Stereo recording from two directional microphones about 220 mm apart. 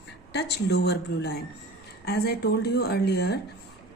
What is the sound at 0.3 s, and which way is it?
Speech, 50° left (ahead or behind).